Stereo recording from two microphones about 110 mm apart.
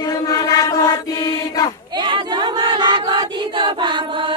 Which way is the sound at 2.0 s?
45° right (ahead or behind).